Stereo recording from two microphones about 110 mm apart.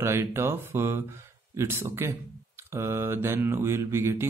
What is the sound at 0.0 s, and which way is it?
Mantra, 25° right (ahead or behind).